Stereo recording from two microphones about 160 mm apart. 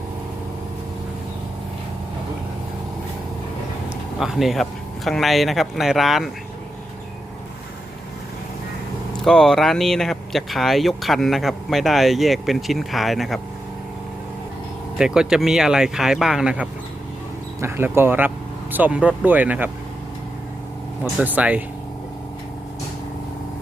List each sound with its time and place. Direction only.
4.2 s speech: centre (ahead or behind)
9.2 s speech: 5° left (ahead or behind)
14.9 s speech: 5° right (ahead or behind)
17.6 s speech: 15° right (ahead or behind)
21.0 s speech: 10° right (ahead or behind)